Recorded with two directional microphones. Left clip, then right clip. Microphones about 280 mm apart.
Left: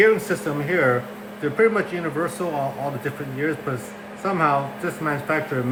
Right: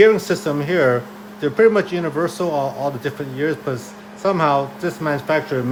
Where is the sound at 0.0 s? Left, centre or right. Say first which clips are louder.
Right 4 dB; right.